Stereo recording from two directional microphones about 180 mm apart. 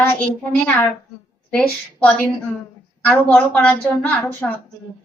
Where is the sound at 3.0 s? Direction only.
5° left (ahead or behind).